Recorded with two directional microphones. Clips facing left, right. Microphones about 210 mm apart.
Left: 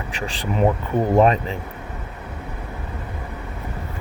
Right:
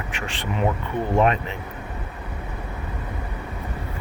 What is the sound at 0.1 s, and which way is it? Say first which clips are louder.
Speech: left 6 dB; 35° left (ahead or behind).